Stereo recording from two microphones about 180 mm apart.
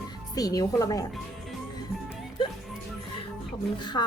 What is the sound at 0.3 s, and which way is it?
Speech, 20° left (ahead or behind).